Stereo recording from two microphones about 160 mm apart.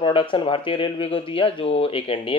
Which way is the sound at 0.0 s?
30° left (ahead or behind).